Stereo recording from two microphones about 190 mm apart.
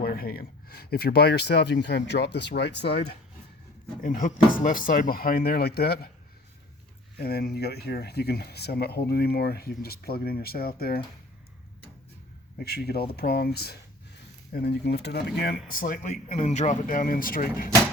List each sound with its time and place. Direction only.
0.0 s speech: 50° left (ahead or behind)
4.0 s speech: 45° left (ahead or behind)
7.2 s speech: 55° left (ahead or behind)
12.5 s speech: 55° left (ahead or behind)
15.7 s speech: 45° left (ahead or behind)